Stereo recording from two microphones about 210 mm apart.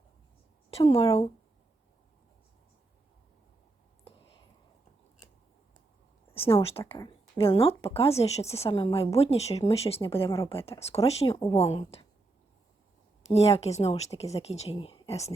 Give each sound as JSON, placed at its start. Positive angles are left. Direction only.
{"t": 0.9, "sound": "speech", "side_deg": 25}
{"t": 6.3, "sound": "speech", "side_deg": 25}
{"t": 13.2, "sound": "speech", "side_deg": 30}